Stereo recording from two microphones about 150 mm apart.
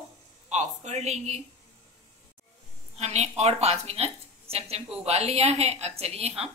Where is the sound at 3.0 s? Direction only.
45° right (ahead or behind).